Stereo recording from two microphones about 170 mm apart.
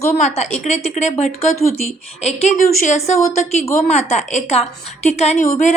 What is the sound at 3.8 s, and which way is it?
A woman's voice, 40° left (ahead or behind).